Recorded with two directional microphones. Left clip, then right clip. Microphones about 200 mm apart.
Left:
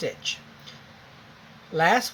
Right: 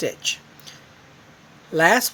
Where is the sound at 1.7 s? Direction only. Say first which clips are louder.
Right 4 dB; 60° right (ahead or behind).